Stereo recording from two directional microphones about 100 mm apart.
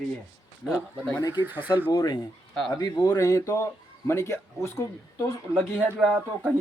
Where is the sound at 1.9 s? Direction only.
40° left (ahead or behind).